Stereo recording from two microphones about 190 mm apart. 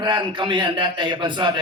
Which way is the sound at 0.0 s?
25° right (ahead or behind).